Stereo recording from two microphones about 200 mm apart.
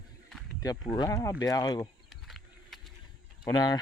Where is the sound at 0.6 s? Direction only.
20° left (ahead or behind).